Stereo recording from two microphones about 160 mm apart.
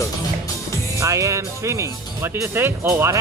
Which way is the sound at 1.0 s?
20° right (ahead or behind).